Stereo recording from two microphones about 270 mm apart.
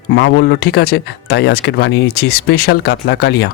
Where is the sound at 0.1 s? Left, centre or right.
Left.